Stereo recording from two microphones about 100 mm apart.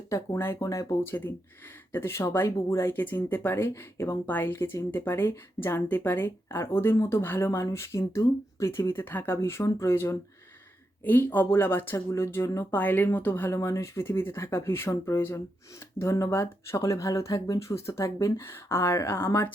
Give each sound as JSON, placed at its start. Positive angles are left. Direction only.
{"t": 0.1, "sound": "speech", "side_deg": 25}